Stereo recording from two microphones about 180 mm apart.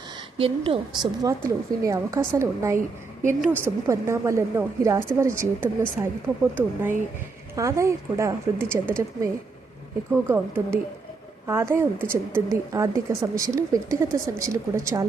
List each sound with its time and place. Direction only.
0.3 s a woman's voice: 30° right (ahead or behind)
1.5 s a woman's voice: 15° right (ahead or behind)